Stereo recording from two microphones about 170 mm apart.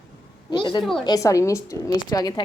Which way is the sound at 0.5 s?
25° left (ahead or behind).